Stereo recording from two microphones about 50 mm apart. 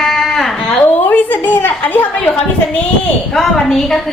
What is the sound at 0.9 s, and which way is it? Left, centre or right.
A woman's voice, left.